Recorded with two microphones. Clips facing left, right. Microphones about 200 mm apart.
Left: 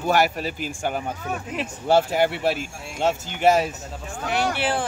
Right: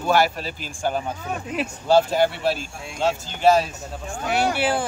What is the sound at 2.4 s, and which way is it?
Speech, 20° left (ahead or behind).